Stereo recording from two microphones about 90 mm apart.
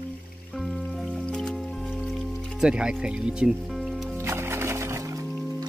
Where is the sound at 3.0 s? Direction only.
10° right (ahead or behind).